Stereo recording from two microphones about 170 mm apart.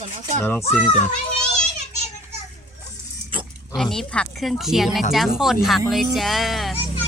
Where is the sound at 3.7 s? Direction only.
Centre (ahead or behind).